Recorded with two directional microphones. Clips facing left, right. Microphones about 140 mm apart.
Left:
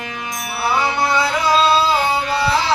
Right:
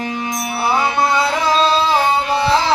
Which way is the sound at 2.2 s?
25° right (ahead or behind).